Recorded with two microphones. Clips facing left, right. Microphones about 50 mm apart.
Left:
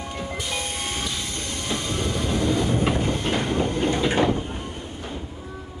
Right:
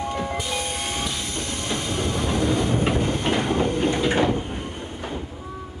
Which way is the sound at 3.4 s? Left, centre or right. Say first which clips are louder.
Right 2 dB; centre.